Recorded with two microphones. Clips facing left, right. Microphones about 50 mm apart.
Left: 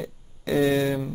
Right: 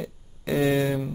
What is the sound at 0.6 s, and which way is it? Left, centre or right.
Speech, centre.